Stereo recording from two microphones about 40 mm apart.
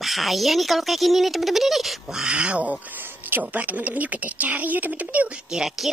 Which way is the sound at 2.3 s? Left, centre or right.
Right.